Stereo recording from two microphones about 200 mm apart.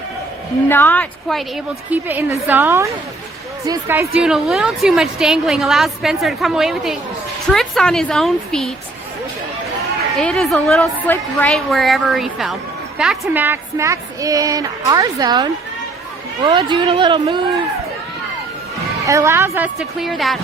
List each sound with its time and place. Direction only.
0.7 s a woman's voice: 10° left (ahead or behind)
1.9 s a woman's voice: 10° right (ahead or behind)
10.2 s a woman's voice: centre (ahead or behind); by 17.4 s 25° right (ahead or behind)
19.0 s a woman's voice: 15° right (ahead or behind)